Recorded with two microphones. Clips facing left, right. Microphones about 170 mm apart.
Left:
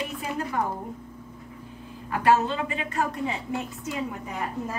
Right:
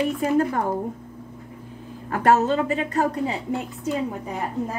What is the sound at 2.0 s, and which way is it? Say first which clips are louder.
A woman's voice: right 3 dB; 45° right (ahead or behind).